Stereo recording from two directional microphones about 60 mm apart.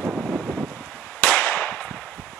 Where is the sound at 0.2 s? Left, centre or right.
Centre.